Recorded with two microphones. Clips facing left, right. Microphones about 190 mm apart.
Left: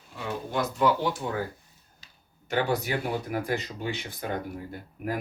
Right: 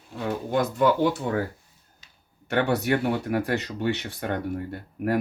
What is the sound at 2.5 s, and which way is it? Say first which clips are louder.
Speech: right 4 dB; 65° right (ahead or behind).